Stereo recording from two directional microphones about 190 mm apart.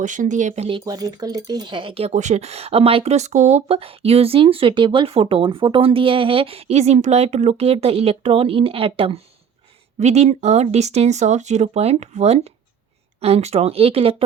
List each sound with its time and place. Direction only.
0.0 s speech: 40° right (ahead or behind)
0.9 s speech: 20° right (ahead or behind)